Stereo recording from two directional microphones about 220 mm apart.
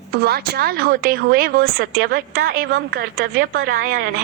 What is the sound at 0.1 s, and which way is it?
A woman's voice, 45° right (ahead or behind).